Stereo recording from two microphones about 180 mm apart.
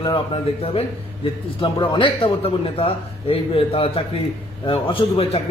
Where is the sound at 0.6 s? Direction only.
30° left (ahead or behind).